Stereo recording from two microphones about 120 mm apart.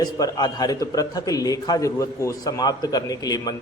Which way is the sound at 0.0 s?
35° left (ahead or behind).